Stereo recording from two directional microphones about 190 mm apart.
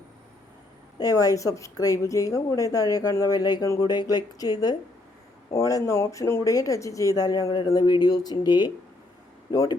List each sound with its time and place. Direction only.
0.9 s a woman's voice: 20° left (ahead or behind)